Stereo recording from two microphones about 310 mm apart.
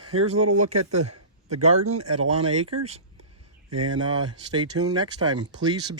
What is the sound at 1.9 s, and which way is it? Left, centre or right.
Speech, right.